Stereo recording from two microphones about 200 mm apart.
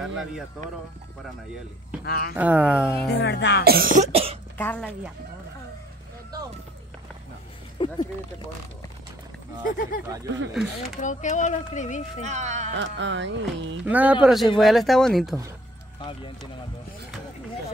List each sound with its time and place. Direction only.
0.0 s speech: centre (ahead or behind)
2.0 s speech: 50° left (ahead or behind)
2.3 s speech: 5° right (ahead or behind)
3.1 s speech: 60° left (ahead or behind)
3.6 s cough: 45° right (ahead or behind); by 4.4 s 30° right (ahead or behind)
4.6 s a woman's voice: 10° left (ahead or behind)
7.8 s a sound: 25° left (ahead or behind)
9.7 s speech: 45° left (ahead or behind)
10.5 s speech: centre (ahead or behind)
11.0 s speech: 40° left (ahead or behind)
12.2 s speech: 35° right (ahead or behind)
12.7 s speech: 65° right (ahead or behind)
13.8 s speech: 10° right (ahead or behind)